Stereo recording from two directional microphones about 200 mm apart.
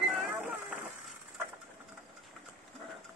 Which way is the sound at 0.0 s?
5° right (ahead or behind).